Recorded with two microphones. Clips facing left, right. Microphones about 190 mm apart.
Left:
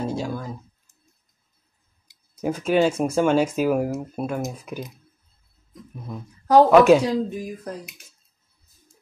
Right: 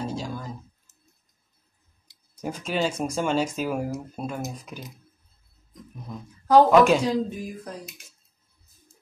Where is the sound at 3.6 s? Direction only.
55° left (ahead or behind).